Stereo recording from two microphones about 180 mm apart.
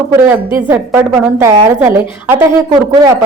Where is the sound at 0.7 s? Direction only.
15° right (ahead or behind).